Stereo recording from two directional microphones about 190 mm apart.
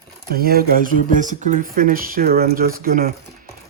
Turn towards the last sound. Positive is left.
turn(degrees=-50)  # may be behind; listen again after turning